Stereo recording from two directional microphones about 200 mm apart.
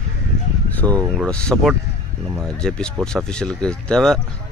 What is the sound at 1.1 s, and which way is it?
Speech, centre (ahead or behind).